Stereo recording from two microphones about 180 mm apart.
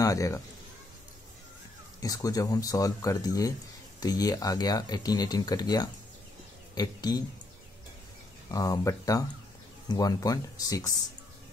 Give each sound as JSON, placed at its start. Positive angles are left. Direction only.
{"t": 0.0, "sound": "speech", "side_deg": 20}
{"t": 2.0, "sound": "speech", "side_deg": 20}
{"t": 8.5, "sound": "speech", "side_deg": 20}